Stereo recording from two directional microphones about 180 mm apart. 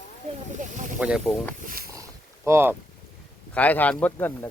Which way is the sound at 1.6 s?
50° right (ahead or behind).